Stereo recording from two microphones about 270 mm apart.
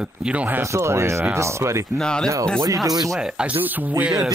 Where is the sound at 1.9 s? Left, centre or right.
Centre.